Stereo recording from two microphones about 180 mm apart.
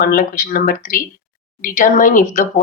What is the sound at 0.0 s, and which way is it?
Speech, 55° left (ahead or behind).